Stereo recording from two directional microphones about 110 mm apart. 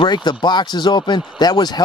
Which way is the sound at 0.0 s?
40° left (ahead or behind).